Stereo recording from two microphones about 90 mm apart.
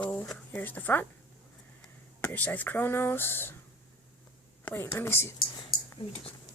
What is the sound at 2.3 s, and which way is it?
Speech, 20° left (ahead or behind).